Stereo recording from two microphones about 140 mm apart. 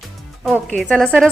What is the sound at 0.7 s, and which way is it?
Speech, 5° left (ahead or behind).